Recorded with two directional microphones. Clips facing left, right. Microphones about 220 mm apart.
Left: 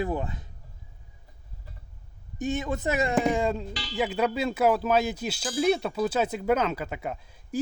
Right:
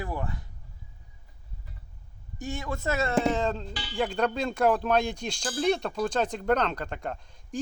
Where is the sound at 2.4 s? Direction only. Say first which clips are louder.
Left 5 dB; 20° left (ahead or behind).